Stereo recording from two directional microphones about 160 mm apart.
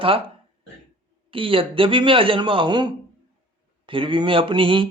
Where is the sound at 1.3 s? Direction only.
35° right (ahead or behind).